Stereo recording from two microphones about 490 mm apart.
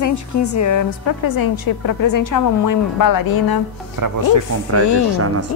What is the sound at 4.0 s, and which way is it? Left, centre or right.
Speech, right.